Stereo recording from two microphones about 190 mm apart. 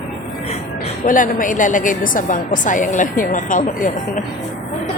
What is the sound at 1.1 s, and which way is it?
A woman's voice, 45° left (ahead or behind).